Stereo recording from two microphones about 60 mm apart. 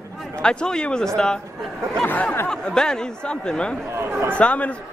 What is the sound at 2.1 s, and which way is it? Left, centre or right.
Speech, left.